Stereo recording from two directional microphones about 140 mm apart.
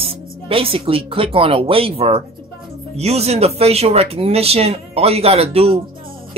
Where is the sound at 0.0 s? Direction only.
40° right (ahead or behind).